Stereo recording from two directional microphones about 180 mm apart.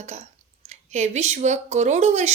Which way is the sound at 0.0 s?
40° right (ahead or behind).